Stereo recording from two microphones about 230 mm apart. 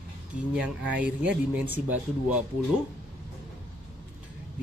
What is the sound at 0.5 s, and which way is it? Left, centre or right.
Speech, centre.